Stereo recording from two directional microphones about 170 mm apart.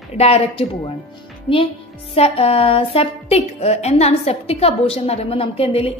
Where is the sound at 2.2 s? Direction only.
35° left (ahead or behind).